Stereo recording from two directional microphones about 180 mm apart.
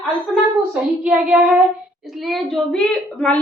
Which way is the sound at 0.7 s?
5° right (ahead or behind).